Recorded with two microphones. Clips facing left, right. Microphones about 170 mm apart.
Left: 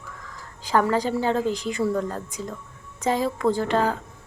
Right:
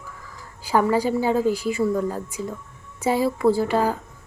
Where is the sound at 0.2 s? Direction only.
10° right (ahead or behind).